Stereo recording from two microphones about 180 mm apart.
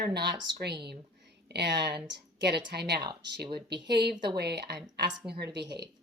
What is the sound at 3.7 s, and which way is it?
Speech, 65° right (ahead or behind).